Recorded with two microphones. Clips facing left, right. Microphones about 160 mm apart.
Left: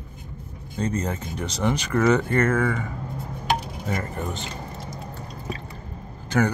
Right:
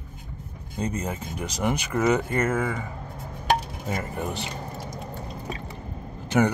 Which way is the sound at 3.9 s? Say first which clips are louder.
Even; 15° right (ahead or behind).